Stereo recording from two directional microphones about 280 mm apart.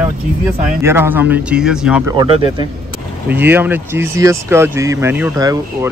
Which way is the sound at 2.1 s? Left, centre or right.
Centre.